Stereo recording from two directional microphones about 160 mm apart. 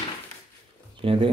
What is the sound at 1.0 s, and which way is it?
Speech, 30° right (ahead or behind).